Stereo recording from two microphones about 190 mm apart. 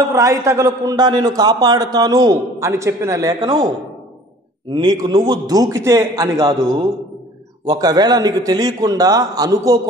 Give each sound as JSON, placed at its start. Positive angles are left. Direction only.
{"t": 0.1, "sound": "a man's voice", "side_deg": -15}
{"t": 4.7, "sound": "a man's voice", "side_deg": -20}